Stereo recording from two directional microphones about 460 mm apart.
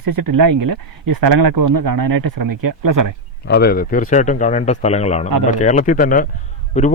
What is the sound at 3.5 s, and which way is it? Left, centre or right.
A man's voice, left.